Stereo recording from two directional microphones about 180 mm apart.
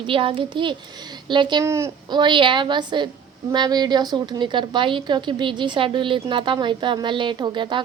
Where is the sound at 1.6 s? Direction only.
15° right (ahead or behind).